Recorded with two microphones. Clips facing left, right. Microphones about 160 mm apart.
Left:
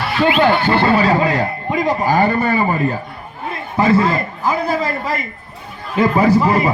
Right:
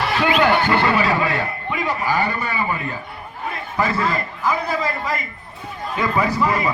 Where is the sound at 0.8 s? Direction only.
35° left (ahead or behind).